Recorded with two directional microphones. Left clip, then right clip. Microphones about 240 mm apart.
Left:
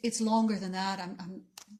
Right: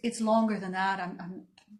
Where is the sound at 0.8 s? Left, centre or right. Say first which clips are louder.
Right 8 dB; left.